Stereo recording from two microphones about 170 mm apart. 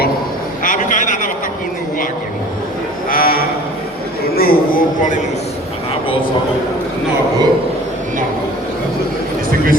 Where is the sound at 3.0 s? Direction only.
60° left (ahead or behind).